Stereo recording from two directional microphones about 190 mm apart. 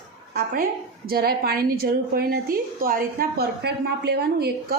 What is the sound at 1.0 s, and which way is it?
A woman's voice, 55° right (ahead or behind).